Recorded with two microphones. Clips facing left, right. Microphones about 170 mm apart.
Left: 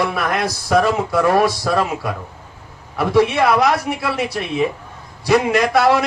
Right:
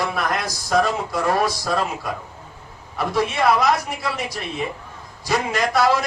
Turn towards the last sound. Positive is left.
turn(degrees=65)  # may be behind; listen again after turning